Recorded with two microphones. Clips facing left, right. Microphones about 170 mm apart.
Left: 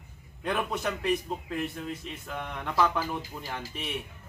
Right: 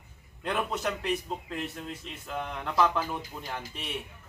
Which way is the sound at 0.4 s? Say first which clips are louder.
Even; centre (ahead or behind).